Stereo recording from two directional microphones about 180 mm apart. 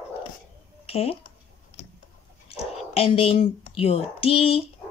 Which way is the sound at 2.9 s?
30° left (ahead or behind).